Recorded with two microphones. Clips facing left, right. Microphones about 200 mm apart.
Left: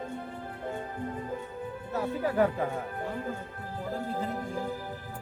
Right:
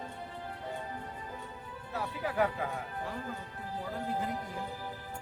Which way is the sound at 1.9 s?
45° left (ahead or behind).